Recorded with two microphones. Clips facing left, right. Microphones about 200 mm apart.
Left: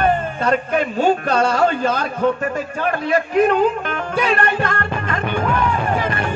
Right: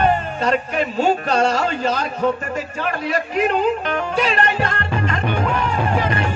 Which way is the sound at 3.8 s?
50° left (ahead or behind).